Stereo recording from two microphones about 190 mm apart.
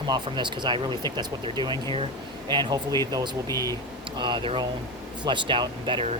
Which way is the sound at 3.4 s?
15° left (ahead or behind).